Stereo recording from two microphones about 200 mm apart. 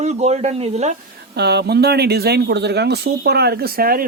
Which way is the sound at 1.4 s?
55° right (ahead or behind).